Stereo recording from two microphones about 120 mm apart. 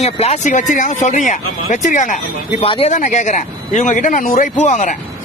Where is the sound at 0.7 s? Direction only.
90° left.